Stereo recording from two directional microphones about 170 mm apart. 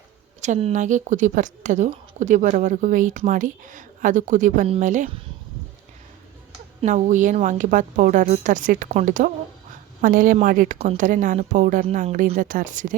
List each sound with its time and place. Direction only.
0.4 s speech: 45° right (ahead or behind)
6.8 s a woman's voice: 45° right (ahead or behind)
11.9 s speech: 35° right (ahead or behind)
12.4 s speech: 50° right (ahead or behind)